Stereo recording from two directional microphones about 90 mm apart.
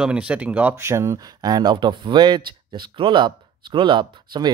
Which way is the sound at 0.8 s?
30° right (ahead or behind).